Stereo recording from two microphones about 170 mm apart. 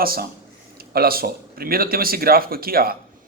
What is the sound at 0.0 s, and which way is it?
Speech, 60° right (ahead or behind).